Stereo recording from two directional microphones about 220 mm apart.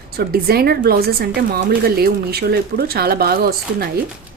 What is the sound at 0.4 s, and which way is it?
Speech, 45° right (ahead or behind).